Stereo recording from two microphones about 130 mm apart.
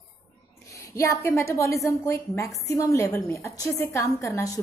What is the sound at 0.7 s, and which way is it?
A woman's voice, 25° left (ahead or behind).